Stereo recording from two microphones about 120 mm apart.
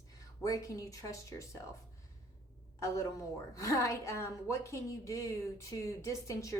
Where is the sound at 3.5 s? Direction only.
25° left (ahead or behind).